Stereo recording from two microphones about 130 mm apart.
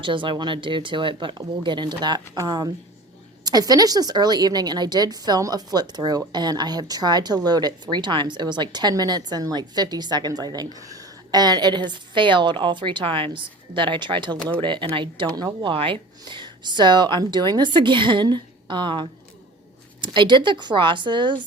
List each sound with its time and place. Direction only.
0.0 s speech: 40° right (ahead or behind)